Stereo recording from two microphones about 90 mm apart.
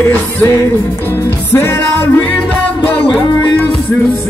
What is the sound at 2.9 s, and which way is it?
Music, 15° left (ahead or behind).